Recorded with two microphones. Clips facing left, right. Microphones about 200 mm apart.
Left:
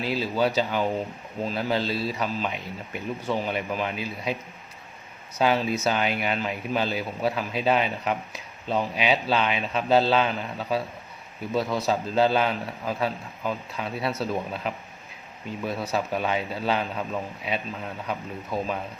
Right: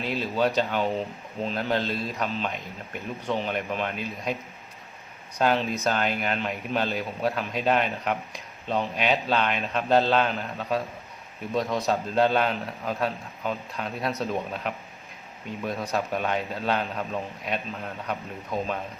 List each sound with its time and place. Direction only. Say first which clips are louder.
0.0 s speech: left 1 dB; 5° left (ahead or behind)
5.4 s speech: left 1 dB; 5° left (ahead or behind)